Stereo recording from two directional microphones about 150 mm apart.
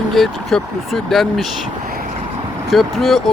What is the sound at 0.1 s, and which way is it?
Speech, centre (ahead or behind).